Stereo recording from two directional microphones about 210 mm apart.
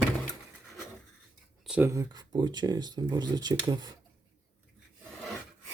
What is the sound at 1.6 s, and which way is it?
Speech, 5° right (ahead or behind).